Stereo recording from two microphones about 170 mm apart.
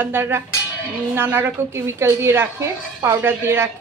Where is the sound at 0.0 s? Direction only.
15° right (ahead or behind).